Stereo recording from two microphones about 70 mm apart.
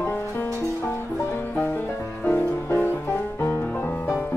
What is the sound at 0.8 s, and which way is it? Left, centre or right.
Music, left.